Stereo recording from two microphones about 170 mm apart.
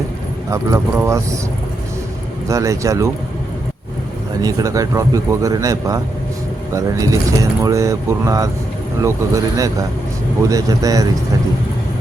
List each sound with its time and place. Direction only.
0.5 s speech: 15° right (ahead or behind)
2.5 s speech: 20° right (ahead or behind)
4.4 s speech: 20° right (ahead or behind)